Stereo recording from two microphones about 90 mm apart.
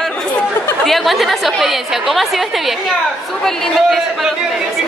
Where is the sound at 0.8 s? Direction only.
Centre (ahead or behind).